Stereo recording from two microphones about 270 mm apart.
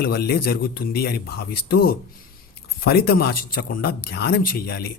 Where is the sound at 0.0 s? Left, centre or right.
Left.